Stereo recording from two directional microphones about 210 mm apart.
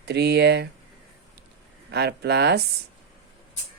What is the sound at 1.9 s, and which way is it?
Speech, 50° right (ahead or behind).